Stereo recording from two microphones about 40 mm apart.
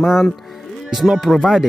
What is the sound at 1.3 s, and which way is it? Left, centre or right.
Speech, centre.